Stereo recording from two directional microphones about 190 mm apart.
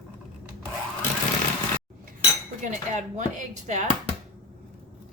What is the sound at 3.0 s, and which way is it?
Speech, 40° right (ahead or behind).